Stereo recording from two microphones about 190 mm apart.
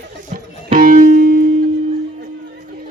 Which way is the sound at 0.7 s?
45° right (ahead or behind).